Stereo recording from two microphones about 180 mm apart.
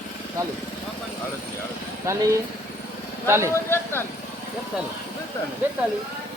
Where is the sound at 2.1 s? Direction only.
15° right (ahead or behind).